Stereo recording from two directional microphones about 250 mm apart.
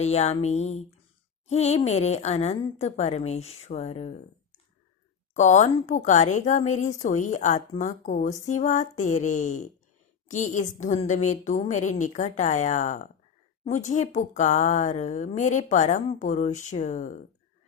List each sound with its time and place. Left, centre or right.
0.0 s speech: left
5.3 s speech: left